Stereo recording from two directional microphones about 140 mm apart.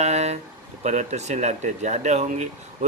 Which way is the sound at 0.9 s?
55° right (ahead or behind).